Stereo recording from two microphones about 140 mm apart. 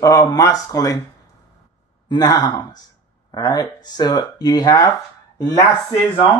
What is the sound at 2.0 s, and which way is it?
Speech, 30° left (ahead or behind).